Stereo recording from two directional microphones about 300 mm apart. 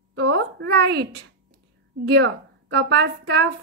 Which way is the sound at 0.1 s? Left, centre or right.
Right.